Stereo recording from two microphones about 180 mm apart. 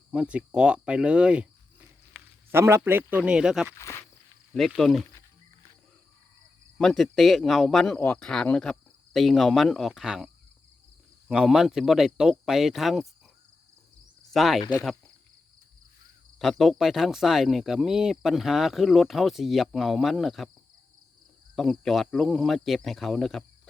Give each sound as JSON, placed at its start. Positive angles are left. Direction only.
{"t": 0.1, "sound": "speech", "side_deg": -5}
{"t": 3.8, "sound": "speech", "side_deg": 15}
{"t": 4.5, "sound": "speech", "side_deg": 0}
{"t": 6.7, "sound": "speech", "side_deg": 0}
{"t": 11.3, "sound": "speech", "side_deg": -5}
{"t": 14.3, "sound": "speech", "side_deg": 0}
{"t": 14.6, "sound": "speech", "side_deg": 20}
{"t": 16.4, "sound": "speech", "side_deg": 0}
{"t": 21.5, "sound": "speech", "side_deg": 0}